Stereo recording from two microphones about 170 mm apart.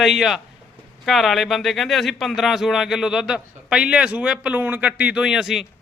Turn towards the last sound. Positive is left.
turn(degrees=0)  # may be behind; listen again after turning